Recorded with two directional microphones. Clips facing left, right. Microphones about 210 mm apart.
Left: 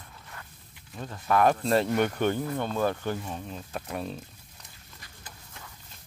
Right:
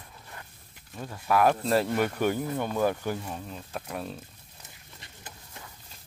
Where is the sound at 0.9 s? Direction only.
5° right (ahead or behind).